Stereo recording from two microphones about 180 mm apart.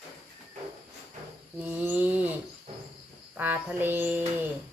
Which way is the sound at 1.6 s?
10° right (ahead or behind).